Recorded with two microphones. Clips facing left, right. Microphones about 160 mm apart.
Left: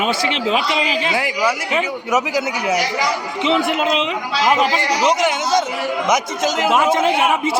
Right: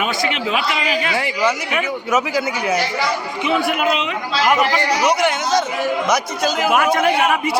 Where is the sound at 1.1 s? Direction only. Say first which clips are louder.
Even; 10° left (ahead or behind).